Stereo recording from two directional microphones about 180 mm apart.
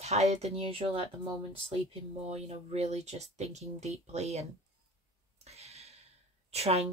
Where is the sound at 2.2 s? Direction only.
35° right (ahead or behind).